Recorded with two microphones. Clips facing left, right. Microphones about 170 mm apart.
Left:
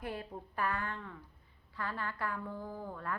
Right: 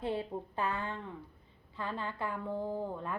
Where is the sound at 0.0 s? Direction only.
20° right (ahead or behind).